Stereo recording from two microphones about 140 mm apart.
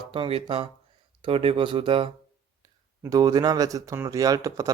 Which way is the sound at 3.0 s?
25° right (ahead or behind).